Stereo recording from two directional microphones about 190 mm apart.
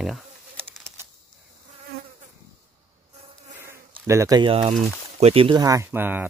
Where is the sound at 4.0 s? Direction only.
15° right (ahead or behind).